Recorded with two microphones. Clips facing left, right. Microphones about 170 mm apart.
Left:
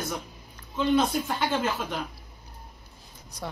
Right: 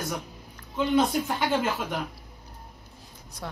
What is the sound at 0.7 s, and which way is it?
Speech, 20° right (ahead or behind).